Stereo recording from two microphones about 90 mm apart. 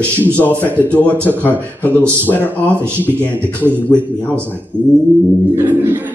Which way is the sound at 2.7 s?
25° right (ahead or behind).